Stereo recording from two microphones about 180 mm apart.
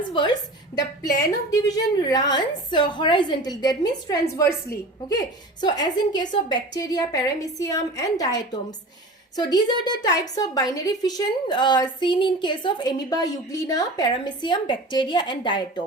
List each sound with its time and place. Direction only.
0.1 s a woman's voice: 25° left (ahead or behind)
5.5 s a woman's voice: 25° left (ahead or behind)